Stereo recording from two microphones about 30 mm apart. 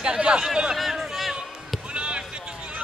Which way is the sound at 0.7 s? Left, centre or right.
Centre.